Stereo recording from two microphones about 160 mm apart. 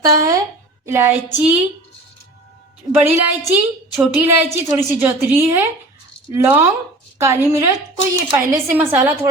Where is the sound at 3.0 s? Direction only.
10° right (ahead or behind).